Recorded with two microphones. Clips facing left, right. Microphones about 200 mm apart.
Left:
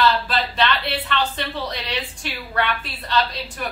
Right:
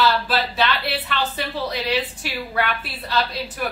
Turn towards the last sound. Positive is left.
turn(degrees=-10)  # may be behind; listen again after turning